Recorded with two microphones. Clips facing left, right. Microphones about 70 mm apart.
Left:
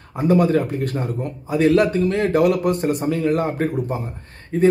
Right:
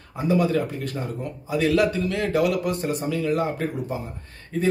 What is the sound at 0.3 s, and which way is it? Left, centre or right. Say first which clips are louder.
A man's voice: left 5 dB; left.